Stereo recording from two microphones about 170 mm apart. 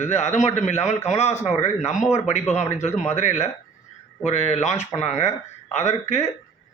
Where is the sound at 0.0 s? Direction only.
40° left (ahead or behind).